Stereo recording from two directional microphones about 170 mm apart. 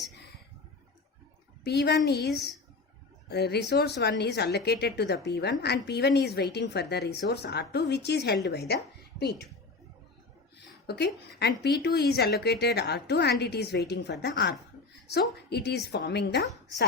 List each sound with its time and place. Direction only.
1.6 s a woman's voice: 75° left (ahead or behind)
10.8 s a woman's voice: 75° left (ahead or behind)